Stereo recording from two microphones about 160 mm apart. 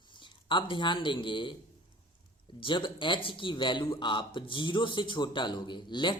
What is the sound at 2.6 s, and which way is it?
Speech, 30° left (ahead or behind).